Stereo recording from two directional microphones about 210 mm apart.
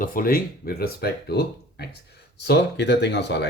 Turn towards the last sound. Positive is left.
turn(degrees=55)  # may be behind; listen again after turning